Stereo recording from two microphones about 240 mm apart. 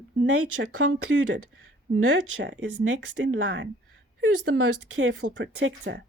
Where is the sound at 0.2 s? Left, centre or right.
Right.